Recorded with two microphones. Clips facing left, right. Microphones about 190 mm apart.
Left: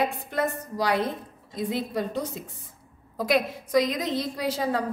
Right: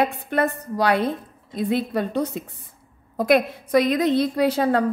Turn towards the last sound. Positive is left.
turn(degrees=-60)  # may be behind; listen again after turning